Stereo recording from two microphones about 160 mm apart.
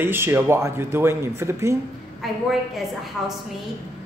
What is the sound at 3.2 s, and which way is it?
Speech, centre (ahead or behind).